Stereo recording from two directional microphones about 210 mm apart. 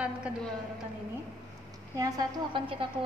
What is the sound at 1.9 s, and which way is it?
Speech, 15° right (ahead or behind).